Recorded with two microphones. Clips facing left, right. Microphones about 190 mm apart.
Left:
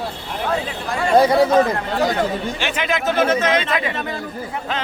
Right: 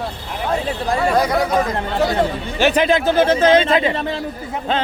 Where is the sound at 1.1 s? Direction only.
30° left (ahead or behind).